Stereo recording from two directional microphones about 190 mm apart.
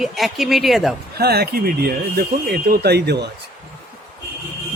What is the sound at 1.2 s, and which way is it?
Speech, 55° right (ahead or behind).